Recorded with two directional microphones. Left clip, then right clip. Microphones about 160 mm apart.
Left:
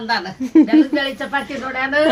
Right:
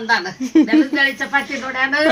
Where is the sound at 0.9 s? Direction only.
35° left (ahead or behind).